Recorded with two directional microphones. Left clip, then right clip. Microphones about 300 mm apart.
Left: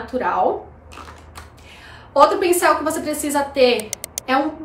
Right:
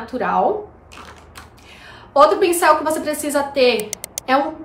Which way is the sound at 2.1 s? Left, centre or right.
Centre.